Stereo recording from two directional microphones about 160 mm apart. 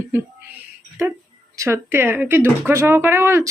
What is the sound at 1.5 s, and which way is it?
Speech, 15° right (ahead or behind).